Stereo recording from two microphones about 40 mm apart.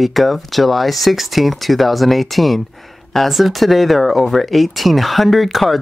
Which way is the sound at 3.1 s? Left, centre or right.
Centre.